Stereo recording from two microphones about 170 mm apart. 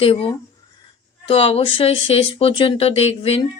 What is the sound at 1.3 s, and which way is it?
Speech, 35° left (ahead or behind).